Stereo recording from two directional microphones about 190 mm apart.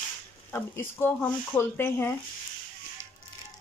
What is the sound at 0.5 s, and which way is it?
Speech, 10° left (ahead or behind).